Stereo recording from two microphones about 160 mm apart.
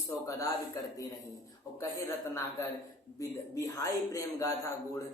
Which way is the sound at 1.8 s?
20° left (ahead or behind).